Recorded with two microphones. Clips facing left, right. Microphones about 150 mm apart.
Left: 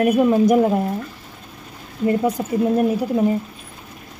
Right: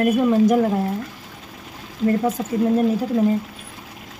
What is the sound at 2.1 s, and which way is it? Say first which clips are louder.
Speech: left 1 dB; 15° left (ahead or behind).